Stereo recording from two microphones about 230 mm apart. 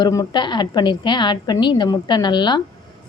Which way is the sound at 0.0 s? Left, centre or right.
Centre.